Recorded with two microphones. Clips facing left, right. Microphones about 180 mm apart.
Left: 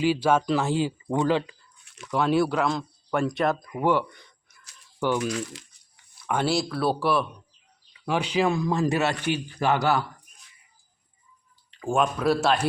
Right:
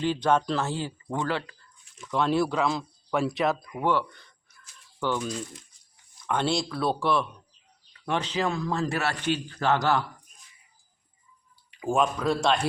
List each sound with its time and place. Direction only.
0.0 s a man's voice: 10° left (ahead or behind)
1.8 s a sound: 70° left (ahead or behind)
2.0 s speech: 5° left (ahead or behind)
3.8 s a man's voice: 15° left (ahead or behind)
5.2 s speech: 85° left
6.2 s a man's voice: 5° left (ahead or behind)
11.7 s a sound: 10° right (ahead or behind)
11.9 s speech: 5° left (ahead or behind)